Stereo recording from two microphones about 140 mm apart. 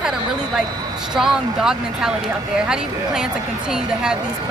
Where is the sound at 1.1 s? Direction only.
5° right (ahead or behind).